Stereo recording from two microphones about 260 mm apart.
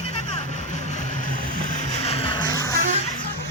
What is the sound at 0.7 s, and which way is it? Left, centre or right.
Vehicle, left.